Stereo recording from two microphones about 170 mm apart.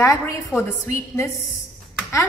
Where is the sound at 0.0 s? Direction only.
15° left (ahead or behind).